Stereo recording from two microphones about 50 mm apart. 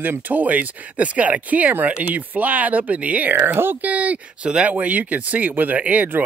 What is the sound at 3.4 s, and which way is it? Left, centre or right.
Speech, right.